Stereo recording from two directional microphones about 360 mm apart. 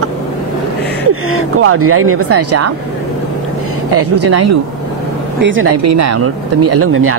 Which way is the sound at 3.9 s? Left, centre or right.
Right.